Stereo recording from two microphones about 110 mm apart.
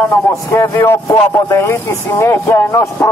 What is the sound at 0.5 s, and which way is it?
Speech, 20° left (ahead or behind).